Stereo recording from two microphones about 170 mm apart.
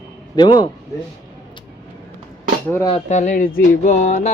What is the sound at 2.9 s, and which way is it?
Speech, 45° left (ahead or behind).